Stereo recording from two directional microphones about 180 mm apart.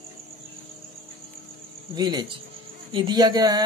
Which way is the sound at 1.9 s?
25° right (ahead or behind).